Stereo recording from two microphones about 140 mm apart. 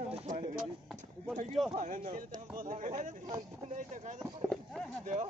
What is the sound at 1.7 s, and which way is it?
Speech, 65° right (ahead or behind).